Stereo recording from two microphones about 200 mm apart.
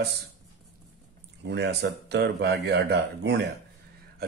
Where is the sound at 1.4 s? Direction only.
60° right (ahead or behind).